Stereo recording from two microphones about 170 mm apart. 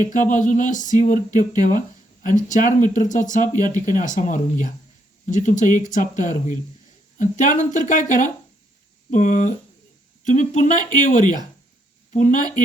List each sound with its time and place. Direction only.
0.0 s speech: 50° left (ahead or behind)